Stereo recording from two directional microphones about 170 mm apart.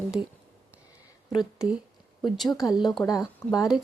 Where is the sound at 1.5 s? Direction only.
5° right (ahead or behind).